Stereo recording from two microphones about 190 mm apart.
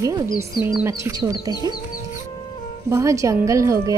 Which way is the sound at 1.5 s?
20° left (ahead or behind).